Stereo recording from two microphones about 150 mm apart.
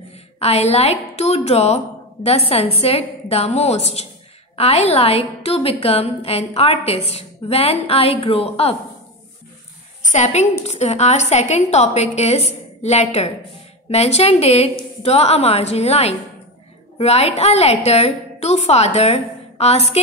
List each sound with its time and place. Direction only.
0.4 s a woman's voice: 45° left (ahead or behind)
10.1 s a woman's voice: 50° left (ahead or behind)